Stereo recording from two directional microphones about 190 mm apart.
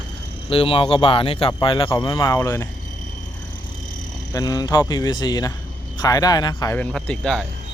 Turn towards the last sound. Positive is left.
turn(degrees=5)  # may be behind; listen again after turning